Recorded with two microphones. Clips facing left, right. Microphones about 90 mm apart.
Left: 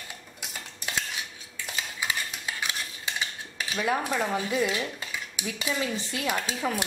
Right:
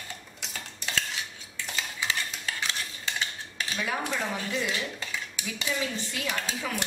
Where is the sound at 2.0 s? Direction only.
15° left (ahead or behind).